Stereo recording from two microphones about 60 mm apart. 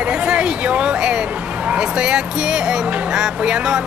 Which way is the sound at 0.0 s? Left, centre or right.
Centre.